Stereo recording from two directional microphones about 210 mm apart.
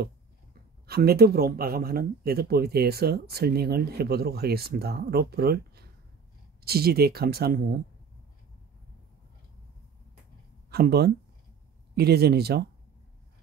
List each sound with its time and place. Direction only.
0.8 s speech: 50° right (ahead or behind)
10.7 s speech: 50° right (ahead or behind)